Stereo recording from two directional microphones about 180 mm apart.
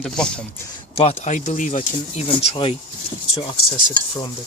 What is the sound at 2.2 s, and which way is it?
Speech, 30° left (ahead or behind).